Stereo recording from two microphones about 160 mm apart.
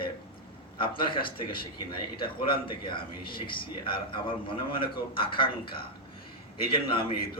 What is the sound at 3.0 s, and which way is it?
Speech, 65° left (ahead or behind).